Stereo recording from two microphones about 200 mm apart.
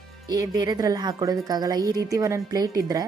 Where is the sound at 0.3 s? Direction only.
20° right (ahead or behind).